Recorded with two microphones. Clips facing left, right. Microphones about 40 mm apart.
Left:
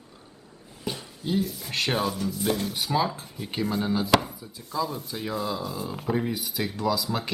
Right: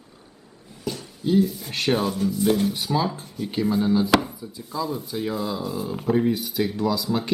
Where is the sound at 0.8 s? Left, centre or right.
Left.